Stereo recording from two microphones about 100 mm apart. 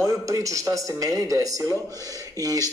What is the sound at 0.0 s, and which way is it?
Speech, 35° right (ahead or behind).